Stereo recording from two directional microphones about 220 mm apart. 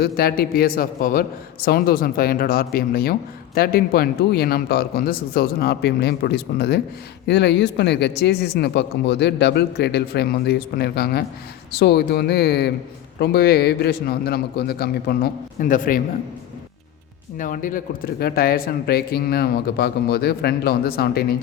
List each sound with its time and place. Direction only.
0.0 s speech: 45° left (ahead or behind)
17.3 s speech: 35° left (ahead or behind)